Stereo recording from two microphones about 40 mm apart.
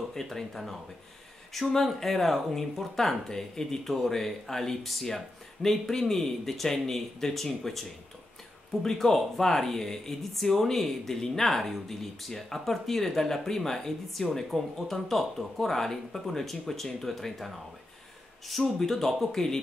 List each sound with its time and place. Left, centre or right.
0.1 s speech: centre
8.8 s speech: centre
18.8 s speech: centre